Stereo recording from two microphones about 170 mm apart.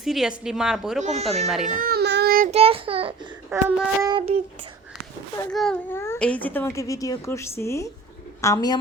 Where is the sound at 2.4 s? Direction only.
35° right (ahead or behind).